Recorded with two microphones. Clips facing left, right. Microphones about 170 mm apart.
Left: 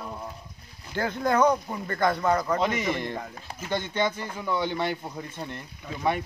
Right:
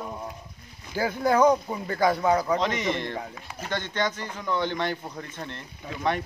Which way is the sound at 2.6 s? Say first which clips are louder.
Even; 10° left (ahead or behind).